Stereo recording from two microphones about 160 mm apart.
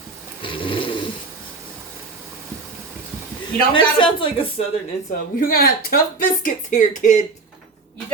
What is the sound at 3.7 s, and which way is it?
Speech, 30° left (ahead or behind).